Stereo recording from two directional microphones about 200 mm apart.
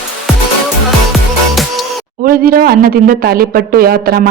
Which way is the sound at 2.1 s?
45° right (ahead or behind).